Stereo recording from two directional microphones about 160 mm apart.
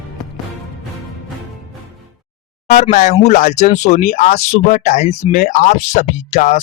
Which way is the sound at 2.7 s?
50° left (ahead or behind).